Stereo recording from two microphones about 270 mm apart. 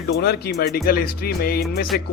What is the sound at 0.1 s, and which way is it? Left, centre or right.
Speech, left.